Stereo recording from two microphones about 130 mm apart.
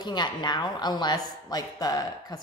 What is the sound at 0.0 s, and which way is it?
A woman's voice, 35° left (ahead or behind).